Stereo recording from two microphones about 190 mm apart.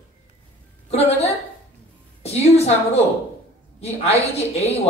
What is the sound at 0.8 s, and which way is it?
Speech, 35° left (ahead or behind).